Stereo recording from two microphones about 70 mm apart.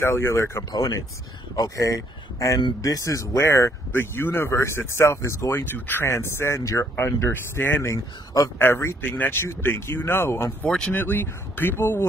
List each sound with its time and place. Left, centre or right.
0.0 s speech: left
0.7 s speech: left
1.8 s speech: left
3.9 s speech: left
7.3 s speech: left
7.9 s speech: left
8.5 s speech: left
9.0 s speech: left